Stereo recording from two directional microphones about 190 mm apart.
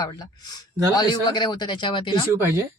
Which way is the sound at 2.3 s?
15° right (ahead or behind).